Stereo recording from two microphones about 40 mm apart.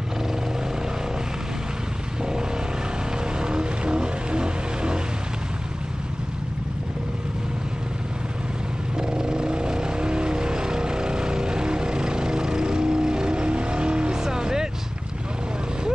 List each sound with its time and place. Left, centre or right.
3.3 s vehicle: right
8.9 s vehicle: centre